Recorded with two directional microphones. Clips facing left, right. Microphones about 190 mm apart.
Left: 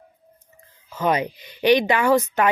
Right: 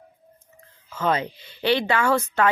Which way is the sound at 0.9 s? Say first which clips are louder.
Left 2 dB; 15° left (ahead or behind).